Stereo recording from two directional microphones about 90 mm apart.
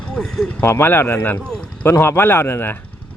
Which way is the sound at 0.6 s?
25° left (ahead or behind).